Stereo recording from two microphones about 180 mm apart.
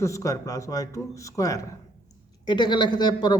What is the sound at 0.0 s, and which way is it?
A man's voice, 15° left (ahead or behind).